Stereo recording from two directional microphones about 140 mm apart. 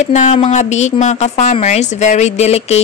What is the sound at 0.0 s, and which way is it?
A woman's voice, 60° left (ahead or behind).